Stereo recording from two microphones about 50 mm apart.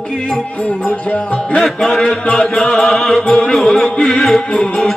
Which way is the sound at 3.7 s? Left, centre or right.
Left.